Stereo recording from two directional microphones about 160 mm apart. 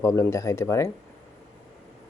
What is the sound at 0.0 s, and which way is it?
Speech, 15° left (ahead or behind).